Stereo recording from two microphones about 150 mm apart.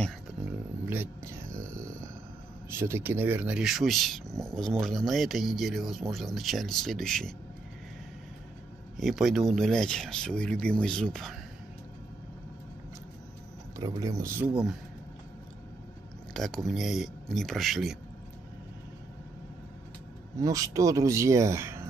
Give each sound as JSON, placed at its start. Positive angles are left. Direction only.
{"t": 0.5, "sound": "a sound", "side_deg": -10}
{"t": 2.8, "sound": "speech", "side_deg": -15}
{"t": 8.9, "sound": "speech", "side_deg": 0}
{"t": 13.7, "sound": "speech", "side_deg": -25}
{"t": 14.4, "sound": "speech", "side_deg": -5}
{"t": 16.3, "sound": "speech", "side_deg": 0}
{"t": 20.3, "sound": "speech", "side_deg": -20}